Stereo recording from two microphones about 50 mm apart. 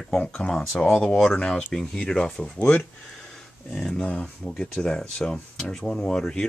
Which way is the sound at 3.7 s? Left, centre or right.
Centre.